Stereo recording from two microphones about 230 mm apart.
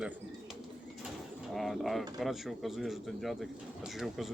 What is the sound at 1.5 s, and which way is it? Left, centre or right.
Speech, centre.